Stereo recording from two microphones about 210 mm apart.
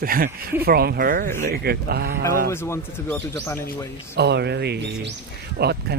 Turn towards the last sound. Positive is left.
turn(degrees=-50)  # may be behind; listen again after turning